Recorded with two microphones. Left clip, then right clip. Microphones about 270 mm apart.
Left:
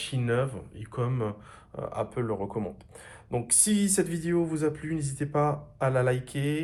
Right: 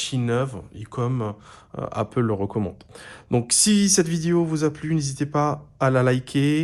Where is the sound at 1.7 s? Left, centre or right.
Right.